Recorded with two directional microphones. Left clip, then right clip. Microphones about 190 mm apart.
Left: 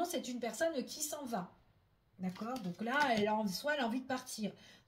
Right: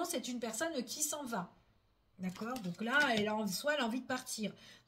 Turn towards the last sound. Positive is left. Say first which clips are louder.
# right 1 dB
turn(degrees=-35)  # may be behind; listen again after turning